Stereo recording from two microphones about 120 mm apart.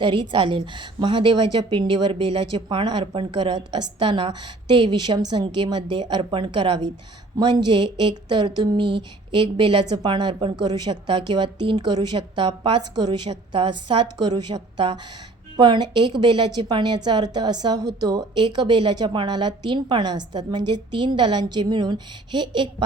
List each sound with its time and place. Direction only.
0.0 s a woman's voice: 45° right (ahead or behind)